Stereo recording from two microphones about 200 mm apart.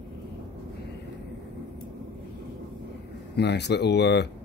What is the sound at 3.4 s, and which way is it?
Speech, 60° left (ahead or behind).